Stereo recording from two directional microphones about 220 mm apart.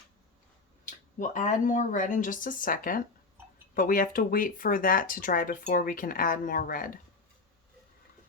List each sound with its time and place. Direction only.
0.9 s speech: 35° left (ahead or behind)